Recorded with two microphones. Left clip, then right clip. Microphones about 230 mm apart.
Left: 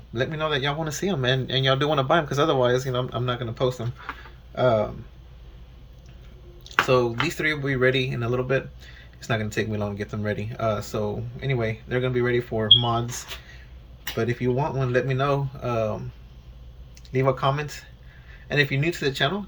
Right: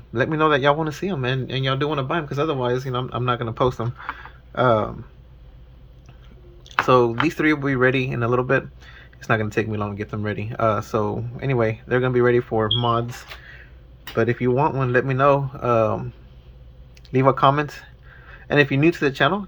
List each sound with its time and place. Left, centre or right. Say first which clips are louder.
0.1 s speech: right 7 dB; centre
0.9 s speech: left 1 dB; centre
6.7 s speech: right 4 dB; centre
17.1 s speech: right 6 dB; right